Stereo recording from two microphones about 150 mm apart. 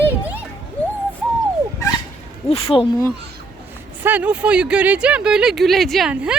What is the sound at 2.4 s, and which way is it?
Speech, 40° left (ahead or behind).